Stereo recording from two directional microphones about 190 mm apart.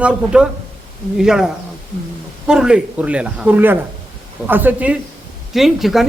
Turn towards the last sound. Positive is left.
turn(degrees=0)  # may be behind; listen again after turning